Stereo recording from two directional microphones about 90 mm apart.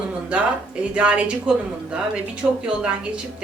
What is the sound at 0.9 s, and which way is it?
Speech, 10° right (ahead or behind).